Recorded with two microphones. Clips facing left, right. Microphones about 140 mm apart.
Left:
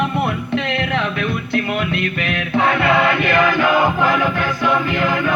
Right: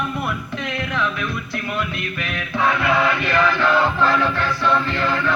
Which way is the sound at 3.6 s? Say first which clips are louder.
Left 2 dB; 15° left (ahead or behind).